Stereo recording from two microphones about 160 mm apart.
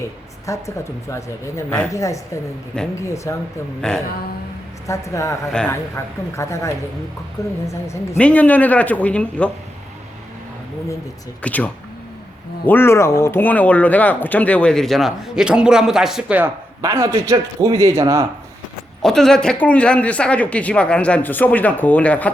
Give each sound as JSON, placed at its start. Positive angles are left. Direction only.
{"t": 0.4, "sound": "a man's voice", "side_deg": 20}
{"t": 3.8, "sound": "speech", "side_deg": 5}
{"t": 4.9, "sound": "a man's voice", "side_deg": 20}
{"t": 5.5, "sound": "speech", "side_deg": 5}
{"t": 6.3, "sound": "a man's voice", "side_deg": 20}
{"t": 8.2, "sound": "speech", "side_deg": 10}
{"t": 11.4, "sound": "speech", "side_deg": 10}
{"t": 19.0, "sound": "speech", "side_deg": 5}